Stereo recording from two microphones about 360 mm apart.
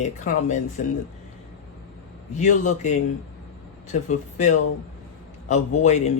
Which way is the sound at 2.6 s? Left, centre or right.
Centre.